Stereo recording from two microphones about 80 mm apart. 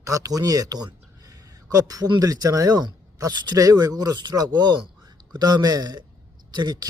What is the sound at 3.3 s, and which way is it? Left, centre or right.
Speech, right.